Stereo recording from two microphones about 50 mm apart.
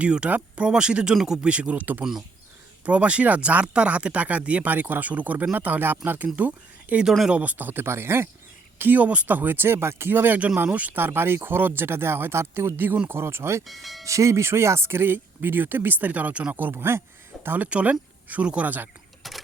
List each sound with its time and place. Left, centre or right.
0.0 s speech: right
1.4 s speech: right
2.8 s speech: right
8.8 s speech: right
10.7 s speech: right
10.9 s speech: right
13.7 s speech: centre
14.0 s speech: right
16.7 s speech: right
17.4 s speech: right
17.7 s speech: right
18.3 s speech: right
19.2 s a sound: centre